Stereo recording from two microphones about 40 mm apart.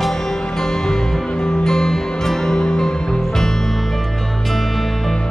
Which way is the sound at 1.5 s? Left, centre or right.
Centre.